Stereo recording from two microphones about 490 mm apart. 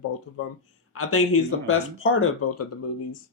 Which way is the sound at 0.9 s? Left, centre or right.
Left.